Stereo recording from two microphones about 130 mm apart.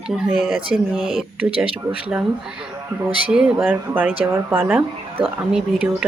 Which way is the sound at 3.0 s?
10° right (ahead or behind).